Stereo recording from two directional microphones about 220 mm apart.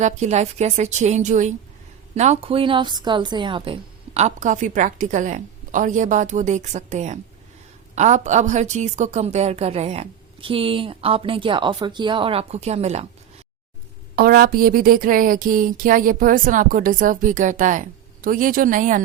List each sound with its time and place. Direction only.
0.0 s a woman's voice: 30° right (ahead or behind)
14.2 s a woman's voice: 40° right (ahead or behind)